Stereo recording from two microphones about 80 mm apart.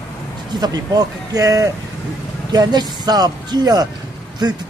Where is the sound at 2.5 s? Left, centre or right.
Right.